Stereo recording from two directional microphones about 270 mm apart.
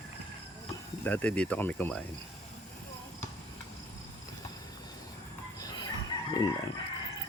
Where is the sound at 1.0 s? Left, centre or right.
Centre.